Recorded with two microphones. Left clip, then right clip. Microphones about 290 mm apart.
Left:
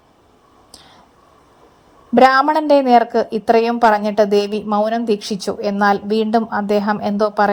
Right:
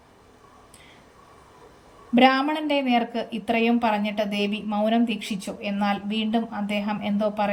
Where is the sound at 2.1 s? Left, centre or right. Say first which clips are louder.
Left 8 dB; left.